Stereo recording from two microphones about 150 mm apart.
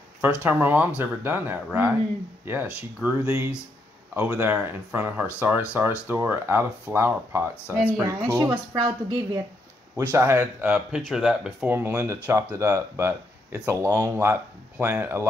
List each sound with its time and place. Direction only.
0.2 s speech: 10° right (ahead or behind)
11.7 s speech: 15° right (ahead or behind)